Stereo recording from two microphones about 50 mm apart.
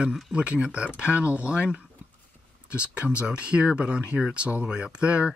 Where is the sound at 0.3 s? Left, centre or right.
Right.